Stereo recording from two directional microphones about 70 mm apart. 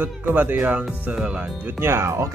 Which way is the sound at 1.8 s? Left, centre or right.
Right.